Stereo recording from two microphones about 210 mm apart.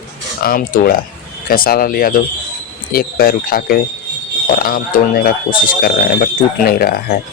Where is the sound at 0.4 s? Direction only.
45° left (ahead or behind).